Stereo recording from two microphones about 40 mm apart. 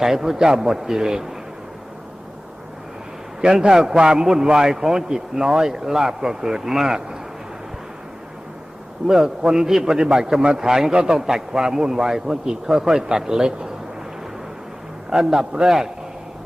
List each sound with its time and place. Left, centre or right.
0.0 s a man's voice: centre
3.4 s a man's voice: centre
9.0 s a man's voice: centre
15.1 s a man's voice: centre